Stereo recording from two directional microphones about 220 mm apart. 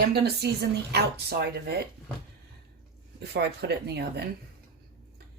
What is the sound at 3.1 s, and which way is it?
Speech, 50° right (ahead or behind).